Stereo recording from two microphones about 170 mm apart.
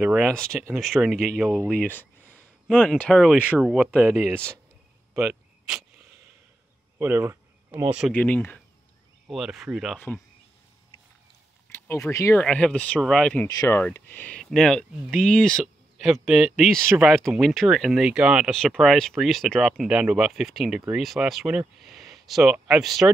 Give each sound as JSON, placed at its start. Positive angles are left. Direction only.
{"t": 0.0, "sound": "speech", "side_deg": -10}
{"t": 0.3, "sound": "speech", "side_deg": 5}
{"t": 4.0, "sound": "speech", "side_deg": 5}
{"t": 5.1, "sound": "speech", "side_deg": -15}
{"t": 7.0, "sound": "a sound", "side_deg": -15}
{"t": 8.1, "sound": "speech", "side_deg": 10}
{"t": 9.3, "sound": "speech", "side_deg": 0}
{"t": 9.9, "sound": "speech", "side_deg": 10}
{"t": 11.7, "sound": "speech", "side_deg": 15}
{"t": 12.4, "sound": "speech", "side_deg": 5}
{"t": 13.5, "sound": "speech", "side_deg": 20}
{"t": 13.7, "sound": "speech", "side_deg": 10}